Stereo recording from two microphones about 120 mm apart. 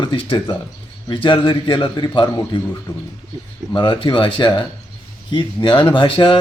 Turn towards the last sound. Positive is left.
turn(degrees=45)  # may be behind; listen again after turning